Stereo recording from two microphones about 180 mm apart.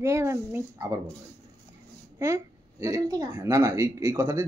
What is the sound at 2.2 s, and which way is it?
A child's voice, 15° right (ahead or behind).